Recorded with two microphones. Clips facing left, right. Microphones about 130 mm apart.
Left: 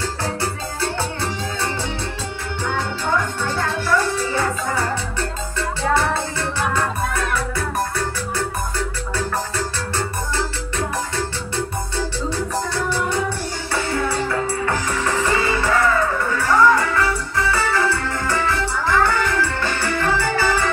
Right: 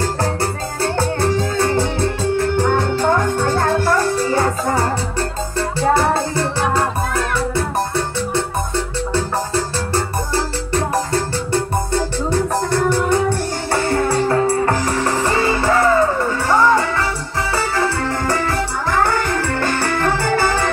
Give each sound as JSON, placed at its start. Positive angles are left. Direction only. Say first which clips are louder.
{"t": 0.9, "sound": "music", "louder": "right 7 dB", "side_deg": -45}
{"t": 8.4, "sound": "music", "louder": "right 3 dB", "side_deg": -25}
{"t": 9.9, "sound": "music", "louder": "right 4 dB", "side_deg": -35}